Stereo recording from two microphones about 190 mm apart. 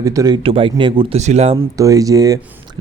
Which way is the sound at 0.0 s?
15° right (ahead or behind).